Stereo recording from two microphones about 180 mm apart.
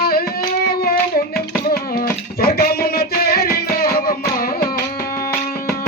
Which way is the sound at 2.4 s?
55° left (ahead or behind).